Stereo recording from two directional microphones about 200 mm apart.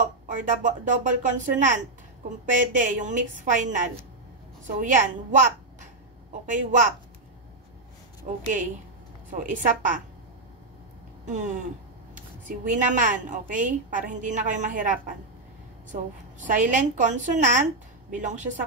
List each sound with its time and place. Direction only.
0.4 s a woman's voice: 40° right (ahead or behind)
8.3 s a woman's voice: 40° right (ahead or behind)
11.2 s a woman's voice: 35° right (ahead or behind)